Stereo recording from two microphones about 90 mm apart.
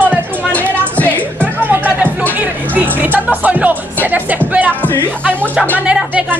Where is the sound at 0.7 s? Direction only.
20° left (ahead or behind).